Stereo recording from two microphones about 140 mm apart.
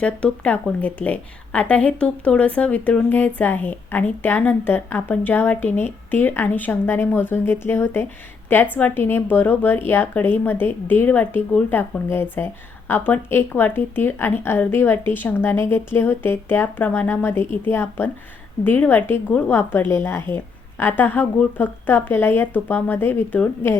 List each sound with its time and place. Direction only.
0.0 s a woman's voice: 10° left (ahead or behind)